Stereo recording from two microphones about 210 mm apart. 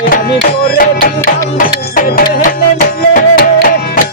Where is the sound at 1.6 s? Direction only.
40° left (ahead or behind).